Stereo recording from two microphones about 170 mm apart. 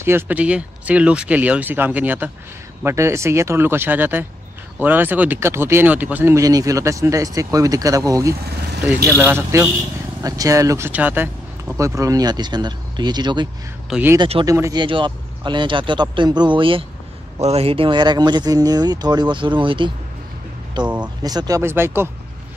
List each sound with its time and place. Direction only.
0.0 s speech: 10° right (ahead or behind)
13.8 s speech: 5° right (ahead or behind)
14.1 s speech: 25° right (ahead or behind)
20.8 s speech: 5° right (ahead or behind)
21.2 s speech: 20° right (ahead or behind)